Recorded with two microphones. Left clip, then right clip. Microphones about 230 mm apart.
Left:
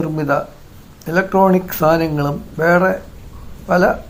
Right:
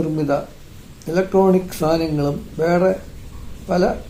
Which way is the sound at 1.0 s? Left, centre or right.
Left.